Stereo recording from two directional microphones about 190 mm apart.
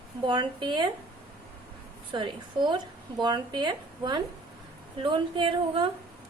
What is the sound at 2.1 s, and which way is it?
A woman's voice, 25° right (ahead or behind).